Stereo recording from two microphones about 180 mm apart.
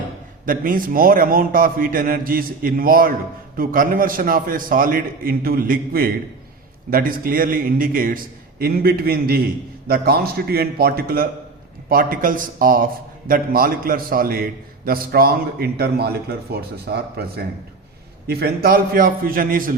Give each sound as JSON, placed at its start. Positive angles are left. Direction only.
{"t": 0.4, "sound": "a man's voice", "side_deg": -50}